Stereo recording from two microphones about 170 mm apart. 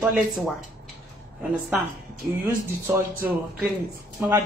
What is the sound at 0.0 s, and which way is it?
Speech, centre (ahead or behind).